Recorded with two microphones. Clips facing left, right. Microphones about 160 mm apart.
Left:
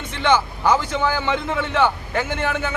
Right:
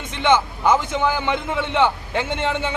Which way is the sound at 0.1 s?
20° right (ahead or behind).